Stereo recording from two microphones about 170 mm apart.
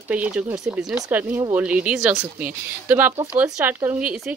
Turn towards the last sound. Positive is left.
turn(degrees=-10)  # may be behind; listen again after turning